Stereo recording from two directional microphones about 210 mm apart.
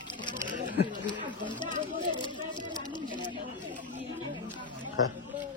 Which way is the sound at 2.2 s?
20° left (ahead or behind).